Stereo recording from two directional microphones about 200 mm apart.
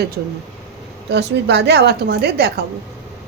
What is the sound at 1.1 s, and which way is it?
Speech, 60° right (ahead or behind).